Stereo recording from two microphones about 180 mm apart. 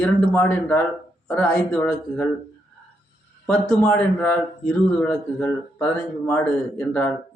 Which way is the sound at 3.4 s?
5° left (ahead or behind).